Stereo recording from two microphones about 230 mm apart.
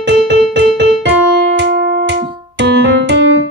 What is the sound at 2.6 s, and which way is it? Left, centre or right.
Music, right.